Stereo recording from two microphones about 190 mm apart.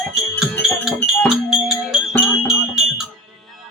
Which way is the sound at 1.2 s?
Centre (ahead or behind).